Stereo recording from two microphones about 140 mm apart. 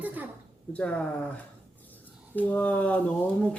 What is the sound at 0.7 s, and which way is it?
Speech, 10° left (ahead or behind).